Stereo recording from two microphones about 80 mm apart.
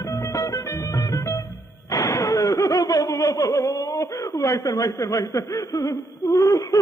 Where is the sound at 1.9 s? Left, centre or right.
Left.